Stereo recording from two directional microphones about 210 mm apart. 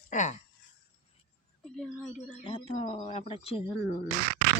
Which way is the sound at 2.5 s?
25° left (ahead or behind).